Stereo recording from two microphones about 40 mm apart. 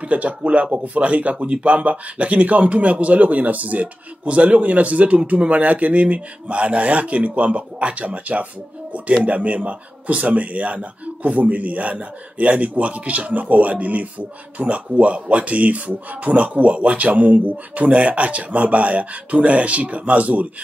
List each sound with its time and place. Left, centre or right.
0.0 s speech: right